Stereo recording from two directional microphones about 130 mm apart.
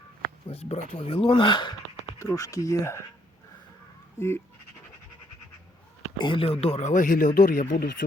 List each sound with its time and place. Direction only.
0.5 s speech: 55° left (ahead or behind); by 1.7 s 35° left (ahead or behind)
2.1 s speech: 25° left (ahead or behind)
4.2 s speech: 25° left (ahead or behind)
6.1 s speech: 40° left (ahead or behind)
6.9 s speech: 90° left